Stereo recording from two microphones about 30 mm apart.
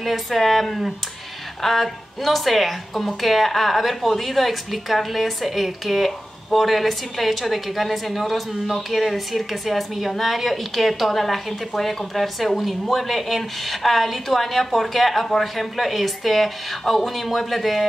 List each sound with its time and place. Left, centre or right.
0.0 s a woman's voice: centre